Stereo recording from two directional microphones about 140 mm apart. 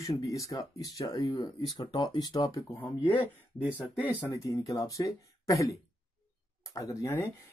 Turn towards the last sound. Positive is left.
turn(degrees=25)  # may be behind; listen again after turning